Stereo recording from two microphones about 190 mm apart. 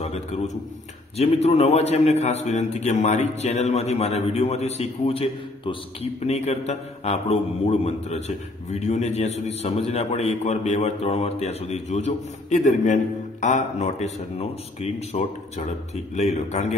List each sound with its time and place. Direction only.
0.0 s a man's voice: 35° left (ahead or behind)
6.2 s a man's voice: 35° left (ahead or behind)